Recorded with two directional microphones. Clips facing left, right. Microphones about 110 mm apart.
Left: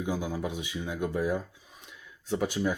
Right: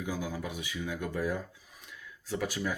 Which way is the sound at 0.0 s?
20° left (ahead or behind).